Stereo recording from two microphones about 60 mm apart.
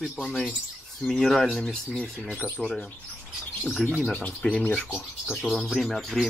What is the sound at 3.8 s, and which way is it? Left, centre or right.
Speech, centre.